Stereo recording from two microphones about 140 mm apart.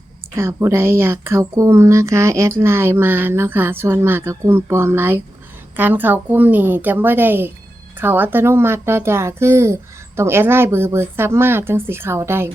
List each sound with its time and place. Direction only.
0.3 s speech: 20° right (ahead or behind)